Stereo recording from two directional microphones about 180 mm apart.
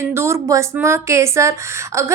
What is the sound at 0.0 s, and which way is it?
Speech, 15° right (ahead or behind).